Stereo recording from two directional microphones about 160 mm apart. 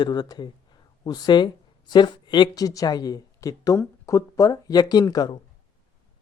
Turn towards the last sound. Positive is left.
turn(degrees=25)  # may be behind; listen again after turning